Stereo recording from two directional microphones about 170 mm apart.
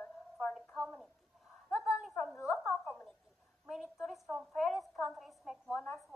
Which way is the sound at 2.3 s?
15° left (ahead or behind).